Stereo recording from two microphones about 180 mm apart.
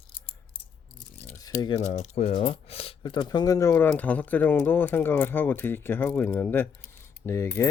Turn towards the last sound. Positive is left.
turn(degrees=15)  # may be behind; listen again after turning